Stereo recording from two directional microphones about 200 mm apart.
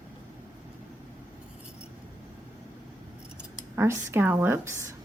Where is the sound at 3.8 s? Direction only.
10° right (ahead or behind).